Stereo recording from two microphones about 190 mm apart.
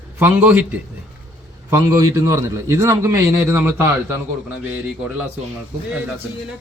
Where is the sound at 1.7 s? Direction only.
15° right (ahead or behind).